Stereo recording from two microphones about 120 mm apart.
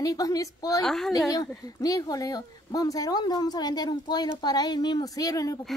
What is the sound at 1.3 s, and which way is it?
Speech, 30° left (ahead or behind).